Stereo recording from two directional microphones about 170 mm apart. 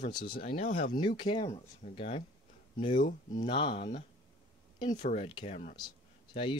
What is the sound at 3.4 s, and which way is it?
Speech, 30° left (ahead or behind).